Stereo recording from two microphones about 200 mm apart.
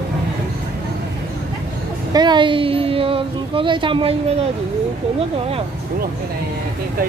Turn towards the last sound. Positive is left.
turn(degrees=-30)  # may be behind; listen again after turning